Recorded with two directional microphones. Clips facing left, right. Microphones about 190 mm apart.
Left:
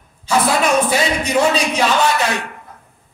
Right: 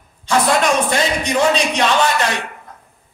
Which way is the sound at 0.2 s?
5° left (ahead or behind).